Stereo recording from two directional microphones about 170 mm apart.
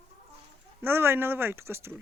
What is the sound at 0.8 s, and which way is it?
Speech, 15° right (ahead or behind).